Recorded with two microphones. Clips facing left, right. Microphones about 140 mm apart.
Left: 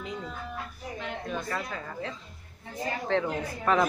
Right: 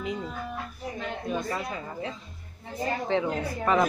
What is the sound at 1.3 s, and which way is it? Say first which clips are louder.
Speech: right 4 dB; 15° right (ahead or behind).